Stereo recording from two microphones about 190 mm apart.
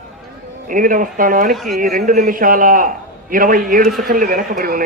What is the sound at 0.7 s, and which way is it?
A man's voice, 45° right (ahead or behind).